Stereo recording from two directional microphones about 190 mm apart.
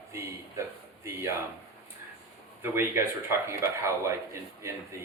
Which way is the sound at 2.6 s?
15° right (ahead or behind).